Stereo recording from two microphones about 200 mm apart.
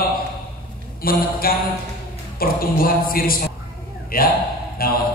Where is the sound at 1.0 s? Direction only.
45° left (ahead or behind).